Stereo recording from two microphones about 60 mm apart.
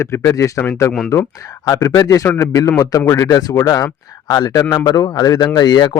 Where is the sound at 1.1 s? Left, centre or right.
Left.